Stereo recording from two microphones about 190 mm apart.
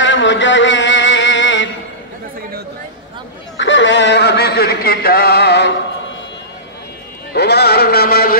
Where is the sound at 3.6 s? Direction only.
75° left (ahead or behind).